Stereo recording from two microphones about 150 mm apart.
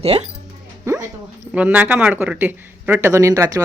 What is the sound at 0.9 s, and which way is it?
Dog, 25° right (ahead or behind).